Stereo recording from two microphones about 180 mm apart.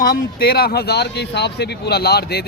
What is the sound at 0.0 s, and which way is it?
Speech, 60° left (ahead or behind).